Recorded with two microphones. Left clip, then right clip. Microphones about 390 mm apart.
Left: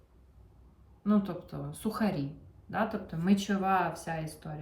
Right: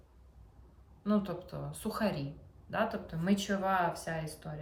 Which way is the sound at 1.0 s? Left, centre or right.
Centre.